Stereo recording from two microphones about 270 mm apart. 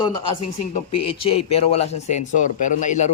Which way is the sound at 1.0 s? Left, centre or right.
Left.